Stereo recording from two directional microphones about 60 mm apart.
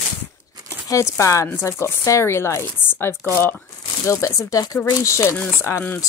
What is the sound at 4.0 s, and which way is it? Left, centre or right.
Speech, left.